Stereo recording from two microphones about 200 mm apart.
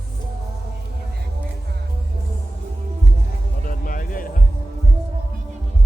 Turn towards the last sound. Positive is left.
turn(degrees=45)  # may be behind; listen again after turning